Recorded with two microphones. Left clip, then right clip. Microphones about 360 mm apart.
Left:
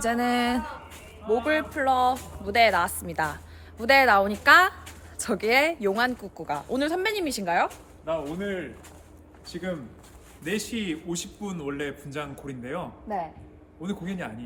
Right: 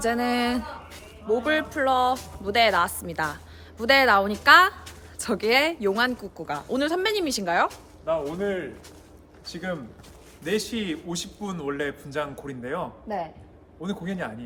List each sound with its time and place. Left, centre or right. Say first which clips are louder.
0.0 s a woman's voice: even; centre
8.0 s speech: right 4 dB; right
10.4 s a man's voice: right 3 dB; centre